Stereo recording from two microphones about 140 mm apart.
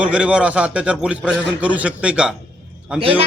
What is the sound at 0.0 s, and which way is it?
A man's voice, 10° right (ahead or behind).